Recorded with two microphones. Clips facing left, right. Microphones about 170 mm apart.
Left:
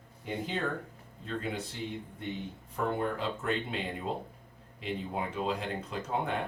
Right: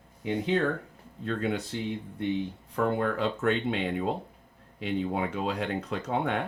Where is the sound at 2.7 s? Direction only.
65° right (ahead or behind).